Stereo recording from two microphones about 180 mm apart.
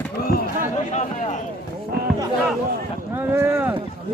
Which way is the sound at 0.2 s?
55° left (ahead or behind).